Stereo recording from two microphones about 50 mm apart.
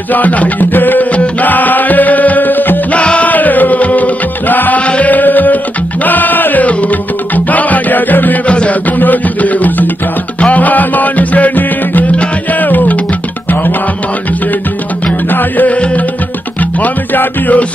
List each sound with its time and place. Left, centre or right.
0.1 s music: left
2.9 s music: left
8.5 s music: left
15.2 s music: left
16.8 s music: left